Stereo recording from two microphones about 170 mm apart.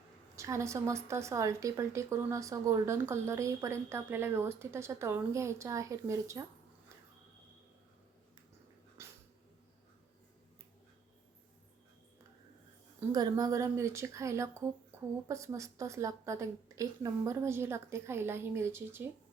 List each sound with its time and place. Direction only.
0.3 s speech: 15° right (ahead or behind)
9.0 s dog: 15° right (ahead or behind)
13.1 s speech: 20° right (ahead or behind)